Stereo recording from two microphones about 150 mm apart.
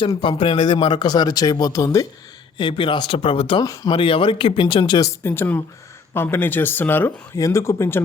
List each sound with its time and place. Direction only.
0.2 s a man's voice: 35° left (ahead or behind)
2.6 s speech: 35° left (ahead or behind); by 8.0 s 15° left (ahead or behind)